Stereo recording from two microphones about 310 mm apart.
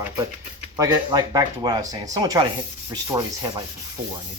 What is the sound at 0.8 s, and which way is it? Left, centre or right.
Rub, centre.